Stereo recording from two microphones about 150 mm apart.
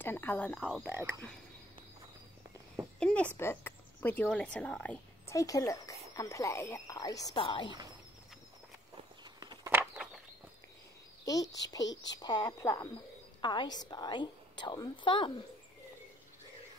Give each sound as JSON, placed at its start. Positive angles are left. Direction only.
{"t": 0.0, "sound": "frog", "side_deg": 15}
{"t": 0.8, "sound": "speech", "side_deg": -15}
{"t": 3.0, "sound": "a sound", "side_deg": 5}
{"t": 3.3, "sound": "speech", "side_deg": 15}
{"t": 5.3, "sound": "speech", "side_deg": 20}
{"t": 7.3, "sound": "a woman's voice", "side_deg": 35}
{"t": 9.2, "sound": "walk", "side_deg": -30}
{"t": 9.7, "sound": "a sound", "side_deg": -15}
{"t": 11.2, "sound": "a woman's voice", "side_deg": 25}